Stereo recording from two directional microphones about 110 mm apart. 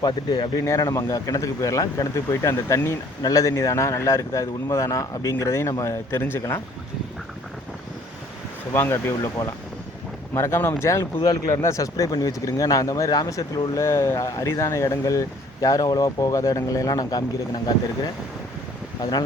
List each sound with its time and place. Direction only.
0.0 s speech: 40° left (ahead or behind)
0.6 s speech: 30° left (ahead or behind)
8.7 s speech: 20° left (ahead or behind)
10.3 s speech: 25° left (ahead or behind)